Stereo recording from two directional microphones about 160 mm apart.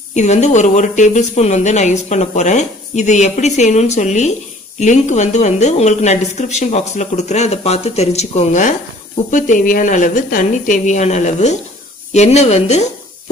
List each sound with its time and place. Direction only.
0.1 s speech: 45° left (ahead or behind)